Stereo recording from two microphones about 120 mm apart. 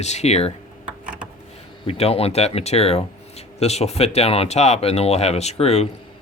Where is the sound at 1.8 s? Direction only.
50° left (ahead or behind).